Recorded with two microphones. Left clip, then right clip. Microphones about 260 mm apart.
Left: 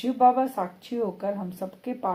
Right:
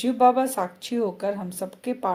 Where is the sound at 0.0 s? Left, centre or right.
Right.